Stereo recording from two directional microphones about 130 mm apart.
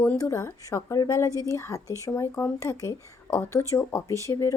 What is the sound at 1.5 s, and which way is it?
A woman's voice, 25° left (ahead or behind).